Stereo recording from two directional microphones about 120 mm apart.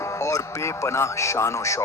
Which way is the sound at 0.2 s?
25° left (ahead or behind).